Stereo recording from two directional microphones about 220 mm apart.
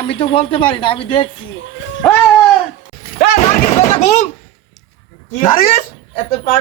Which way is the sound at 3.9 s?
30° left (ahead or behind).